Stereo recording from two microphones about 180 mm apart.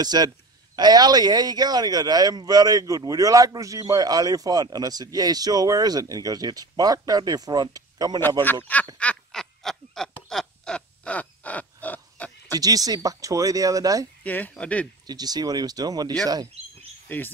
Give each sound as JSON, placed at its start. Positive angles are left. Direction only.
{"t": 0.0, "sound": "speech", "side_deg": -20}
{"t": 8.9, "sound": "snicker", "side_deg": 5}
{"t": 12.5, "sound": "speech", "side_deg": -20}
{"t": 14.2, "sound": "speech", "side_deg": 10}
{"t": 15.0, "sound": "speech", "side_deg": -20}
{"t": 17.1, "sound": "speech", "side_deg": 10}